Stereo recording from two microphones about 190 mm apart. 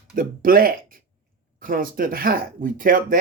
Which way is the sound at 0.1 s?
50° right (ahead or behind).